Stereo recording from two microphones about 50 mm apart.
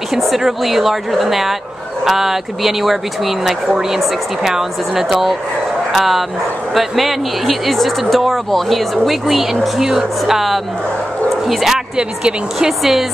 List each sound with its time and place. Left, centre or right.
0.1 s speech: centre
12.0 s a woman's voice: centre
12.5 s speech: centre